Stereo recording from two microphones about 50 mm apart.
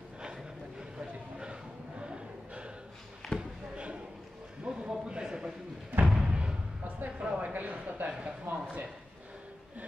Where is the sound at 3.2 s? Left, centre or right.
Centre.